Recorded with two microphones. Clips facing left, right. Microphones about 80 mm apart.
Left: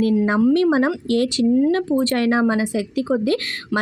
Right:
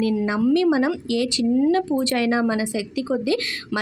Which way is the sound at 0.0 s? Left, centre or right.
Left.